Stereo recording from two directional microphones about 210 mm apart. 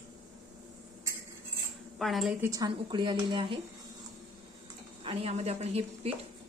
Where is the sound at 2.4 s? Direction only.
15° right (ahead or behind).